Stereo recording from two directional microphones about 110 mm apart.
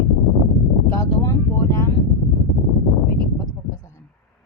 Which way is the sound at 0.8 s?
25° left (ahead or behind).